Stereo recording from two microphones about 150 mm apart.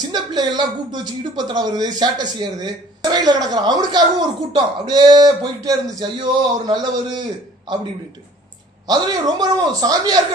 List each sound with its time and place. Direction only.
0.1 s speech: 30° right (ahead or behind)
8.8 s speech: 25° right (ahead or behind)